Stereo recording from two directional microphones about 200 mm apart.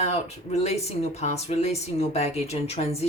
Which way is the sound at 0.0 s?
30° left (ahead or behind).